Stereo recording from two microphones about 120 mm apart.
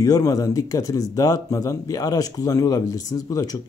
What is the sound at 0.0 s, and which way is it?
Speech, 30° left (ahead or behind).